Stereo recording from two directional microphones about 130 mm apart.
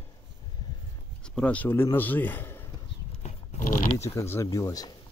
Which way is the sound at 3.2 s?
75° left (ahead or behind).